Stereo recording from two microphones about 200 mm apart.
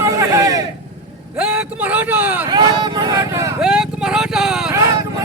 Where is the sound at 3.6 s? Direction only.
5° right (ahead or behind).